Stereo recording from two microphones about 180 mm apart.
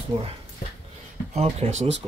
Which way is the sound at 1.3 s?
35° right (ahead or behind).